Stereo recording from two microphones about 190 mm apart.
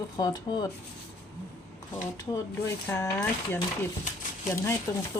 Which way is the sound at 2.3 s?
15° left (ahead or behind).